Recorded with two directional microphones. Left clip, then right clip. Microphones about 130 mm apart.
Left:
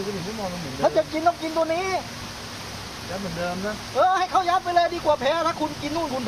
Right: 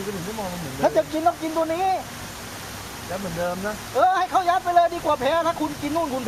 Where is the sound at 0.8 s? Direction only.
55° right (ahead or behind).